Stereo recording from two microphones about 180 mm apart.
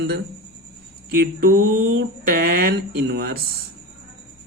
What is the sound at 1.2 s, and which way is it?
Speech, 55° right (ahead or behind).